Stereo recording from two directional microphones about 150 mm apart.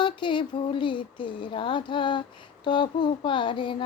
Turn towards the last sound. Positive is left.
turn(degrees=35)  # may be behind; listen again after turning